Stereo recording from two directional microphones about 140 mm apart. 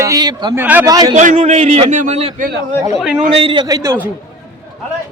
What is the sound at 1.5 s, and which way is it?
Speech, 45° right (ahead or behind).